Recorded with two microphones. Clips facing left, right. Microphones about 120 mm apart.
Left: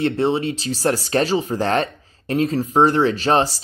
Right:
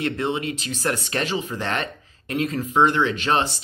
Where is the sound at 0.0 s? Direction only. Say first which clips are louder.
Left 6 dB; 30° left (ahead or behind).